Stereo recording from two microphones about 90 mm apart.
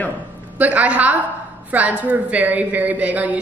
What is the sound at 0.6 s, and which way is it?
A woman's voice, 15° right (ahead or behind).